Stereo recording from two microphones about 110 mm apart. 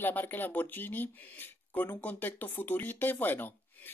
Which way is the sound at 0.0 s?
15° left (ahead or behind).